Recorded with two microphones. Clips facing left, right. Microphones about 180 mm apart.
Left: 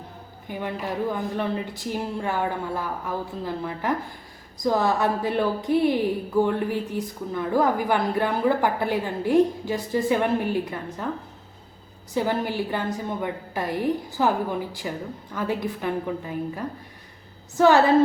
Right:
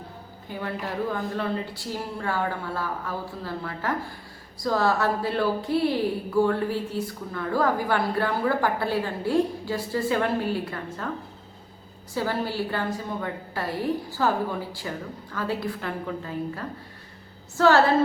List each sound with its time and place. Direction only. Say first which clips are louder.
0.4 s speech: left 2 dB; 15° left (ahead or behind)
12.1 s speech: left 3 dB; 20° left (ahead or behind)